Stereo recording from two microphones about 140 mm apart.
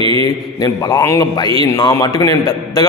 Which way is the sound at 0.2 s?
25° left (ahead or behind).